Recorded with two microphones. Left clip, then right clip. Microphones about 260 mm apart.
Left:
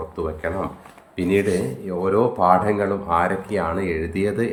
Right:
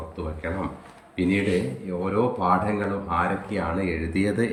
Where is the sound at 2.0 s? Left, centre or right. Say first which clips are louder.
Left 6 dB; centre.